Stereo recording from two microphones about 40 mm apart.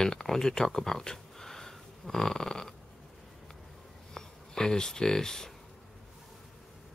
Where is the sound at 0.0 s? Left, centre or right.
Centre.